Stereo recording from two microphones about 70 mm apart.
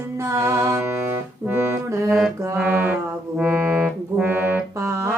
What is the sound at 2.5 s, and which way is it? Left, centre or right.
Music, right.